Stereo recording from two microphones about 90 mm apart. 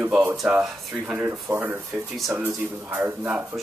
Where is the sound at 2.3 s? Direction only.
20° right (ahead or behind).